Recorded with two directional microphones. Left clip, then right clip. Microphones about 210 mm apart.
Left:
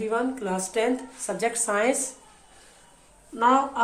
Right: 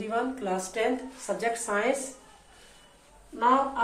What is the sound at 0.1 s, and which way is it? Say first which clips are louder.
Speech: right 1 dB; 55° left (ahead or behind).